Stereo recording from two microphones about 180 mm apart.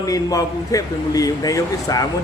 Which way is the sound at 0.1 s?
20° left (ahead or behind).